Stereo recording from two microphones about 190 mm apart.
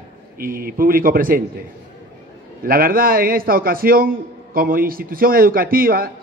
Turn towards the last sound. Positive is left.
turn(degrees=-50)  # may be behind; listen again after turning